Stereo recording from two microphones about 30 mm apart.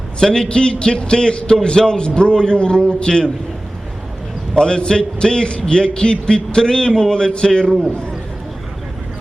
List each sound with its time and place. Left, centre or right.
0.2 s a man's voice: left
4.5 s a man's voice: left